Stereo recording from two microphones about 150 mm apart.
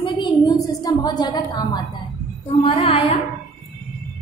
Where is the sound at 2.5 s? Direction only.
40° left (ahead or behind).